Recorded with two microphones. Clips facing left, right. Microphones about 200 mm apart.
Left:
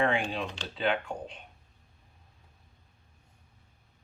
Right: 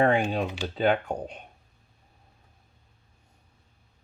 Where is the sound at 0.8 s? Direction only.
40° right (ahead or behind).